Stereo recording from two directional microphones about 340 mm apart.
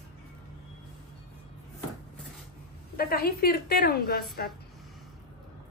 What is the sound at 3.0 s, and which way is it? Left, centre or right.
A woman's voice, left.